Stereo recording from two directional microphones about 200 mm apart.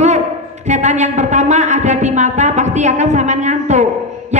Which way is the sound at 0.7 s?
35° right (ahead or behind).